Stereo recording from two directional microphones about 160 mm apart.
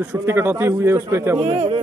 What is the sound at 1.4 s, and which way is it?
Speech, 40° right (ahead or behind).